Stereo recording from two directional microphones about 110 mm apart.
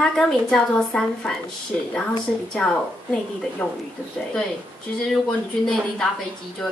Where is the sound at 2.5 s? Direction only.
5° left (ahead or behind).